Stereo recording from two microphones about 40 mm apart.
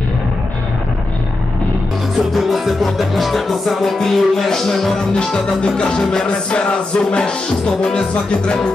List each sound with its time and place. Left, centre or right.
2.1 s music: centre
5.1 s music: left